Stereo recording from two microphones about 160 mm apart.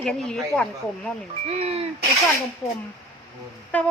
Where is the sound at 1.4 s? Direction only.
40° right (ahead or behind).